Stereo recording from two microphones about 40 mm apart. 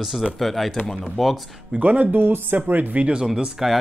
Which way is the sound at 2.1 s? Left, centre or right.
Right.